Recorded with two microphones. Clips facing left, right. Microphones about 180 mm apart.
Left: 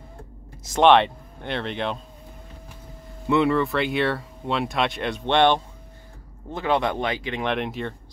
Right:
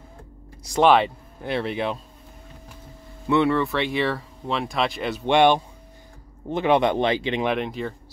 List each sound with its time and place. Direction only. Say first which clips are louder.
0.7 s speech: left 1 dB; 5° right (ahead or behind)
3.3 s speech: even; centre (ahead or behind); by 7.4 s 25° right (ahead or behind)
7.4 s speech: right 1 dB; centre (ahead or behind)